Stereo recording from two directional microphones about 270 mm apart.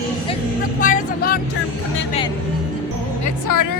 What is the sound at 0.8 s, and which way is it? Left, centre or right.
Speech, left.